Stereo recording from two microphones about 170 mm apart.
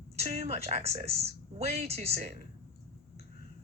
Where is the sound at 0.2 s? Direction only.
40° right (ahead or behind).